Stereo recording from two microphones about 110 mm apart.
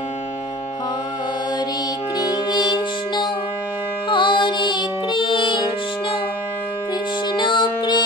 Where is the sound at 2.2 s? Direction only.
40° left (ahead or behind).